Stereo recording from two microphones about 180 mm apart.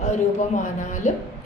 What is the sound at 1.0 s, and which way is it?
Speech, 40° left (ahead or behind).